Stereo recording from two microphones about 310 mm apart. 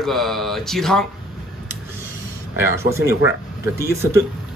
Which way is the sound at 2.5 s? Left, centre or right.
Centre.